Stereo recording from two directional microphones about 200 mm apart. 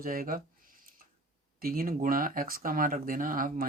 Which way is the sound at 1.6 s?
45° right (ahead or behind).